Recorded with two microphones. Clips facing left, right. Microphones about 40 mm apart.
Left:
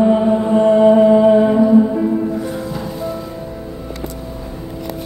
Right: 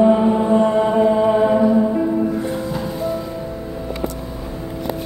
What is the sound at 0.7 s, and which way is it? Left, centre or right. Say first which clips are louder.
Chant: left 6 dB; centre.